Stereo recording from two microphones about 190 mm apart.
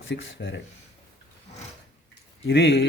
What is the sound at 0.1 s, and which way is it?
Speech, 65° left (ahead or behind).